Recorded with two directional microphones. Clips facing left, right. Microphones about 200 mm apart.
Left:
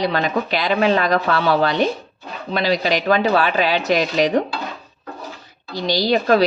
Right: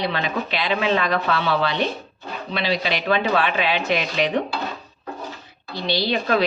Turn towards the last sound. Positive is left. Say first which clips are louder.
# left 5 dB
turn(degrees=40)  # may be behind; listen again after turning